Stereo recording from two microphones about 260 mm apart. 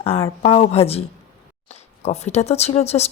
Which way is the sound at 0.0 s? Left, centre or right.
Left.